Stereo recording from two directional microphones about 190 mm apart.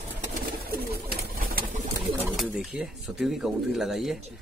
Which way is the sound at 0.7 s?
50° right (ahead or behind).